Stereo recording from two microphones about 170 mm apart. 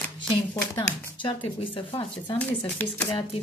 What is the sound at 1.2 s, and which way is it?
Speech, 30° left (ahead or behind).